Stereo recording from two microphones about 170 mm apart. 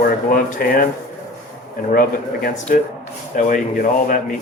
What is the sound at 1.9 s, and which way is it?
Speech, 60° left (ahead or behind).